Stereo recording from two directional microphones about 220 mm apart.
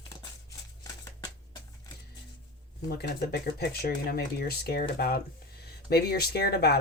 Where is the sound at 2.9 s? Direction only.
45° left (ahead or behind).